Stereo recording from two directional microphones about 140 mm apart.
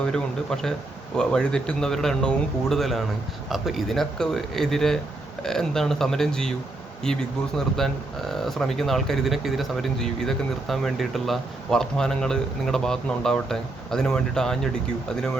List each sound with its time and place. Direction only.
0.0 s speech: 5° left (ahead or behind)